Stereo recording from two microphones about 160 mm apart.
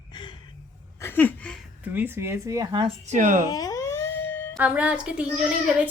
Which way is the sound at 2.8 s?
50° right (ahead or behind).